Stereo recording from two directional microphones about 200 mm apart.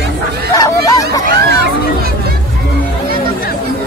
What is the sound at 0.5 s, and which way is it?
Hubbub, 20° left (ahead or behind).